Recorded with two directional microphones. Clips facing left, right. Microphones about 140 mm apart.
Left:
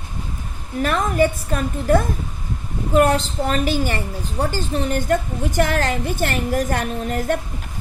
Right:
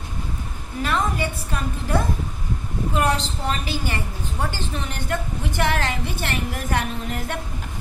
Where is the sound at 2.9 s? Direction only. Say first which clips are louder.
Left 7 dB; 45° left (ahead or behind).